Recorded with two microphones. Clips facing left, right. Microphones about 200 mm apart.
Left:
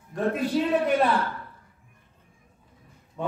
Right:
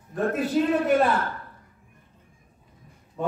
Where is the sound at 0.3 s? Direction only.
45° right (ahead or behind).